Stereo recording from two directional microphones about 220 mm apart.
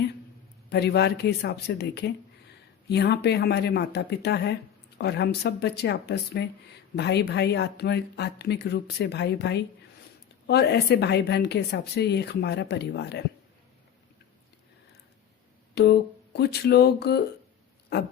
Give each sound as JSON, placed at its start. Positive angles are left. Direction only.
{"t": 0.7, "sound": "a woman's voice", "side_deg": 50}
{"t": 15.7, "sound": "a woman's voice", "side_deg": 45}